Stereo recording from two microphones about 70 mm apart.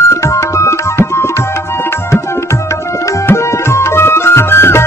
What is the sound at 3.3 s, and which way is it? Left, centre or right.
Music, left.